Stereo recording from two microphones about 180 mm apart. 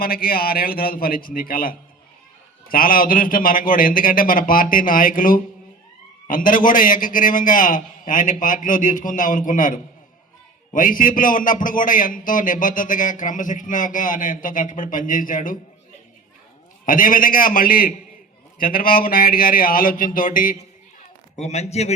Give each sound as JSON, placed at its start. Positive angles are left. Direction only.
{"t": 0.0, "sound": "a man's voice", "side_deg": 55}
{"t": 16.8, "sound": "a man's voice", "side_deg": 50}
{"t": 21.3, "sound": "a man's voice", "side_deg": 40}